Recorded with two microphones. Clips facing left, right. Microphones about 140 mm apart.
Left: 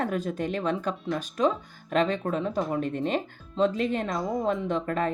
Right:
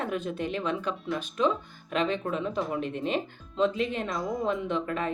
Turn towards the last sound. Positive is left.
turn(degrees=40)  # may be behind; listen again after turning